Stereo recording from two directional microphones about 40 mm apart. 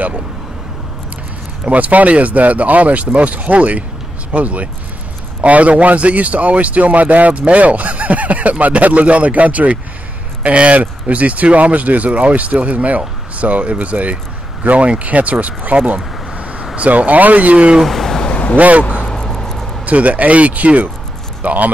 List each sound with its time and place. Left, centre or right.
1.7 s speech: right
16.3 s vehicle: right
16.7 s speech: right
17.8 s a sound: centre
18.6 s speech: right
19.0 s vehicle: centre
19.9 s speech: right